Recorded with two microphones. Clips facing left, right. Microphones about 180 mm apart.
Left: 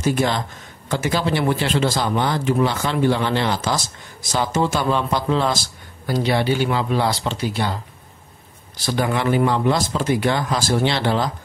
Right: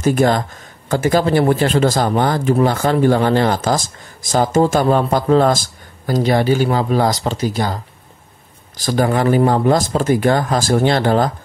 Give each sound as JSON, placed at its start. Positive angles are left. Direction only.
{"t": 0.0, "sound": "speech", "side_deg": -50}